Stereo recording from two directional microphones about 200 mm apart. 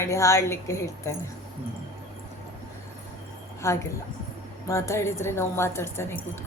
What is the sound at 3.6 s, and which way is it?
Speech, 15° left (ahead or behind).